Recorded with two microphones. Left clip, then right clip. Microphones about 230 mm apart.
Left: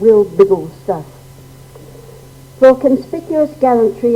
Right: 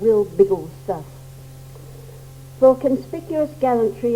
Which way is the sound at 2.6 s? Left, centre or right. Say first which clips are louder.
Left 6 dB; left.